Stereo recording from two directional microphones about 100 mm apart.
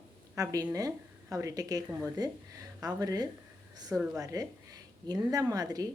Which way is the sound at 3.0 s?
40° right (ahead or behind).